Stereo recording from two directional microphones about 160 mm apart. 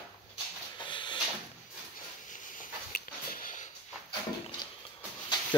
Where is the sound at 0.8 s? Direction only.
30° left (ahead or behind).